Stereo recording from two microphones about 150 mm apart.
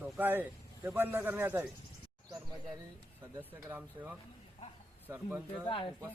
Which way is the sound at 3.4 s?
10° right (ahead or behind).